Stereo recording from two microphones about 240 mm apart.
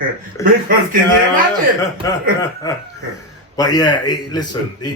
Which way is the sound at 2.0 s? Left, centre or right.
Centre.